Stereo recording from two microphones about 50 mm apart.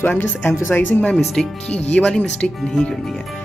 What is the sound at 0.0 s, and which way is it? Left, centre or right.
Speech, left.